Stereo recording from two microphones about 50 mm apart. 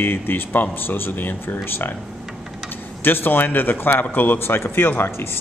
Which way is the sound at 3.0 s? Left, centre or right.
Left.